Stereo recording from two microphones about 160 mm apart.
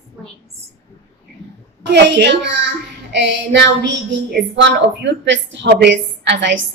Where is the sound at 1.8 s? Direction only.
90° right.